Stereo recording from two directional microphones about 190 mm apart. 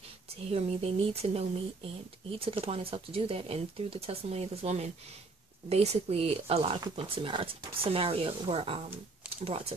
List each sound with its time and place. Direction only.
0.5 s speech: 30° right (ahead or behind)